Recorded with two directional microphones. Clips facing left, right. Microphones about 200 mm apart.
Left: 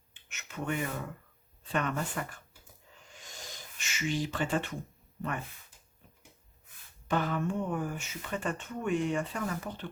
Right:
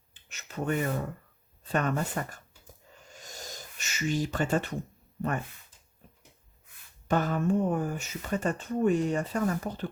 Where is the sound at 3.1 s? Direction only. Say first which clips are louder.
Right 4 dB; 40° right (ahead or behind).